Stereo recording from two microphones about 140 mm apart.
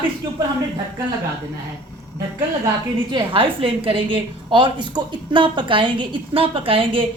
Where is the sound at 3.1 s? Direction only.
40° right (ahead or behind).